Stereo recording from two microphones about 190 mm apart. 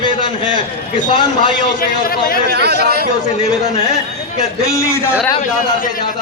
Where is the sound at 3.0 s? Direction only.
35° left (ahead or behind).